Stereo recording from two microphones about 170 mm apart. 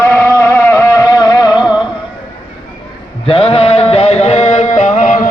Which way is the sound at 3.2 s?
35° left (ahead or behind).